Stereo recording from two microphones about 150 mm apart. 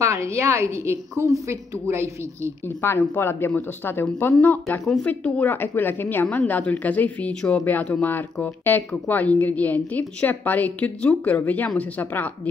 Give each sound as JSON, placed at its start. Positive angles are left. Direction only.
{"t": 0.0, "sound": "a woman's voice", "side_deg": -20}
{"t": 2.8, "sound": "a woman's voice", "side_deg": 15}